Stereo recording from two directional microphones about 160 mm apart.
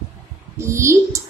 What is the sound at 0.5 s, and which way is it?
Speech, 15° right (ahead or behind).